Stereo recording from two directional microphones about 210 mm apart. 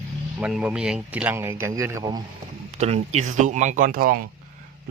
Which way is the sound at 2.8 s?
30° right (ahead or behind).